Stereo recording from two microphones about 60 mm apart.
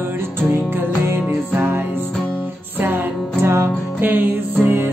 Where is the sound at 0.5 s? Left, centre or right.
Right.